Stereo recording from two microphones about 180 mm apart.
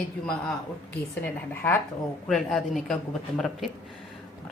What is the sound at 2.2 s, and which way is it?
Speech, centre (ahead or behind).